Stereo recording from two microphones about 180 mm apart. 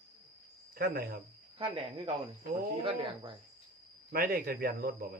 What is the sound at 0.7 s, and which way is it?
Speech, 60° right (ahead or behind).